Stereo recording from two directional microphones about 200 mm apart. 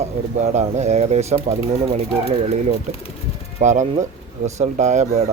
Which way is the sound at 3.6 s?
35° right (ahead or behind).